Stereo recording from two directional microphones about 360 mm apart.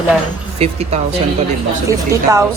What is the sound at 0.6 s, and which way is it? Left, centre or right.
A woman's voice, centre.